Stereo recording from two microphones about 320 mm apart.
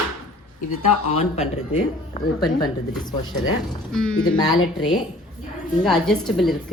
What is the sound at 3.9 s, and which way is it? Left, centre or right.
Speech, centre.